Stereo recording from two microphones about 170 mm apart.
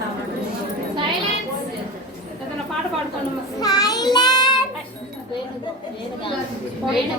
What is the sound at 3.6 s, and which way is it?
Child singing, 20° left (ahead or behind).